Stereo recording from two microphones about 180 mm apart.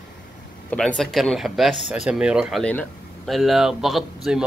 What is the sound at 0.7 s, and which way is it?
Speech, 5° left (ahead or behind).